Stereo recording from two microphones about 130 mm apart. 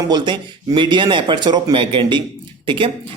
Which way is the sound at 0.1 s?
35° right (ahead or behind).